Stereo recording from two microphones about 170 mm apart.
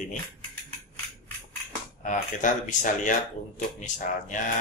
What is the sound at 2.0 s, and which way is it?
Speech, 45° left (ahead or behind).